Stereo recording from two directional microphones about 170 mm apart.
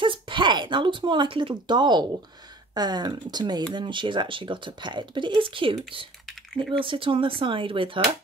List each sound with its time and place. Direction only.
0.0 s speech: 30° right (ahead or behind)
6.8 s speech: 30° right (ahead or behind)